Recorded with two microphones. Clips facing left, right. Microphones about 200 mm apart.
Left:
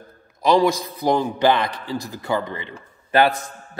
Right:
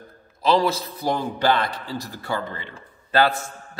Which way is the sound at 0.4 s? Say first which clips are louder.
Left 3 dB; 15° left (ahead or behind).